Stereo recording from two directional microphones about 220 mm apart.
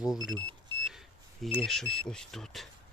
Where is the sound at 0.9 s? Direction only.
Centre (ahead or behind).